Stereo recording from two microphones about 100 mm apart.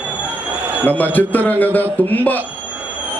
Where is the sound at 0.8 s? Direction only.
15° left (ahead or behind).